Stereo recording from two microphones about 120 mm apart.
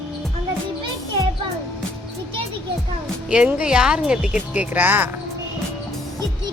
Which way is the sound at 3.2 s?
10° right (ahead or behind).